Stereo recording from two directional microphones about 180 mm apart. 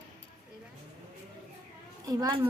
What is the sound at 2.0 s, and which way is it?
Speech, 20° right (ahead or behind).